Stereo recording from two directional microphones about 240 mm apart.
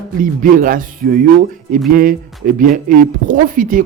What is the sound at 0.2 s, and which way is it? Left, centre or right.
Speech, right.